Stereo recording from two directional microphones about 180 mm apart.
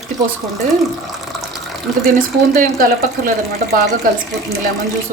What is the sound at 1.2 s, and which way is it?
Water, centre (ahead or behind).